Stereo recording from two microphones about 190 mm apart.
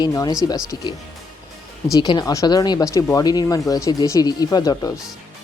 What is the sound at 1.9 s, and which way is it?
Speech, 20° left (ahead or behind).